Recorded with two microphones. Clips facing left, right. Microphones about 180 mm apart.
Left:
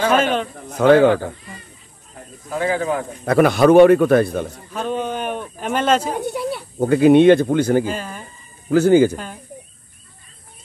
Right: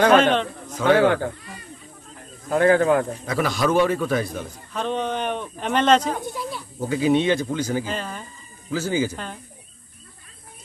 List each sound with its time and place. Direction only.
0.1 s speech: 5° left (ahead or behind)
0.7 s a man's voice: 60° left (ahead or behind)
1.0 s speech: 55° right (ahead or behind)
2.5 s speech: 55° right (ahead or behind)
3.3 s a man's voice: 60° left (ahead or behind)
4.7 s speech: 5° left (ahead or behind)
6.2 s speech: 70° left (ahead or behind)
7.8 s speech: 10° left (ahead or behind)
8.6 s a man's voice: 60° left (ahead or behind)
9.1 s speech: 5° left (ahead or behind)